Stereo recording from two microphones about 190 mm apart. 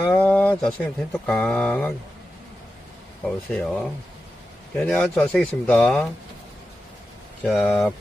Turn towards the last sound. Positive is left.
turn(degrees=5)  # may be behind; listen again after turning